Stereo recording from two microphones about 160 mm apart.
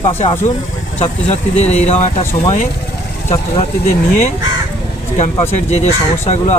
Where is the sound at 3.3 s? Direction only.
40° left (ahead or behind).